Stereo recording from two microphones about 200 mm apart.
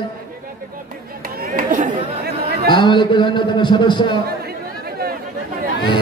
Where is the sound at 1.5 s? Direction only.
40° right (ahead or behind).